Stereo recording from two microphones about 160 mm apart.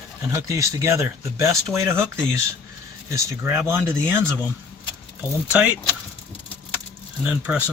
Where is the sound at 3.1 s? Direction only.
20° right (ahead or behind).